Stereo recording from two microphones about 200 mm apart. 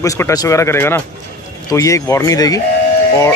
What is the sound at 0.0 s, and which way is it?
Speech, 15° left (ahead or behind).